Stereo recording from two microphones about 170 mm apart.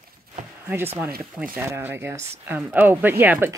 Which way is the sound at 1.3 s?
10° right (ahead or behind).